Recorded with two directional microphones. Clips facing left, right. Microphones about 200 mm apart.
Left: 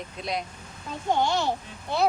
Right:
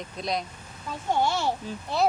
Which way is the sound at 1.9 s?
Centre (ahead or behind).